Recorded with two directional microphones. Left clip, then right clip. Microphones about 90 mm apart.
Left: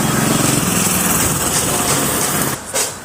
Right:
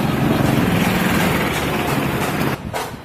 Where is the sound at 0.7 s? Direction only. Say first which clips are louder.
Left 1 dB; 35° left (ahead or behind).